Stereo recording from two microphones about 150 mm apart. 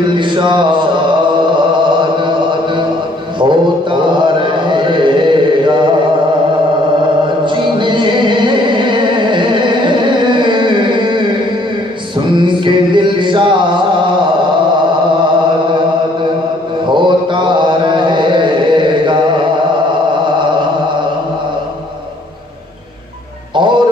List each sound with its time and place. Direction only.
0.2 s mantra: 30° right (ahead or behind)
2.0 s chant: 30° right (ahead or behind)
3.3 s a sound: 30° right (ahead or behind)
7.4 s music: 30° right (ahead or behind)
12.4 s music: 30° right (ahead or behind)
16.9 s mantra: 30° right (ahead or behind)
23.5 s music: 30° right (ahead or behind)